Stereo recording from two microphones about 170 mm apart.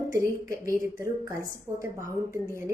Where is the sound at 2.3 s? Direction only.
15° right (ahead or behind).